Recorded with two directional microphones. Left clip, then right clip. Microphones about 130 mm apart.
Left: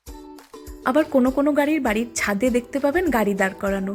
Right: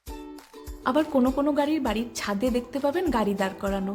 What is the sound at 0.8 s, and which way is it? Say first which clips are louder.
A woman's voice: left 4 dB; 25° left (ahead or behind).